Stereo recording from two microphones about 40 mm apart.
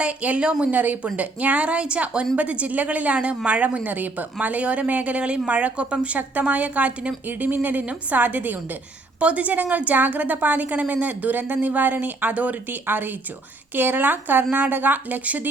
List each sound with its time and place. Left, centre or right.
0.0 s a woman's voice: right
0.7 s a woman's voice: right
6.5 s a woman's voice: right
7.3 s a woman's voice: right
9.2 s a woman's voice: right
12.8 s a woman's voice: right